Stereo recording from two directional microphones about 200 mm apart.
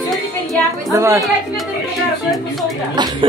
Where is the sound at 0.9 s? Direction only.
15° right (ahead or behind).